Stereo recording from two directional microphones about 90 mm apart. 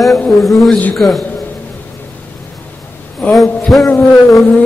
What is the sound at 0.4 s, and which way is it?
Speech, centre (ahead or behind).